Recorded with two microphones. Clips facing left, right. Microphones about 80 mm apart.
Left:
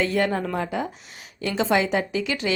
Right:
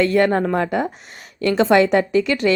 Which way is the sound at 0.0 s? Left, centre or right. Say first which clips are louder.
Right 7 dB; right.